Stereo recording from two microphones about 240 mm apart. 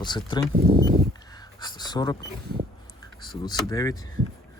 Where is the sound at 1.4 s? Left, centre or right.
Centre.